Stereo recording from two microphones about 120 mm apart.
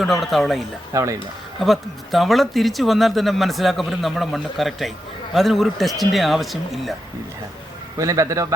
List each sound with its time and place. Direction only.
0.0 s speech: centre (ahead or behind)
0.9 s a man's voice: 25° right (ahead or behind)
1.6 s speech: centre (ahead or behind)
7.9 s a man's voice: 25° right (ahead or behind)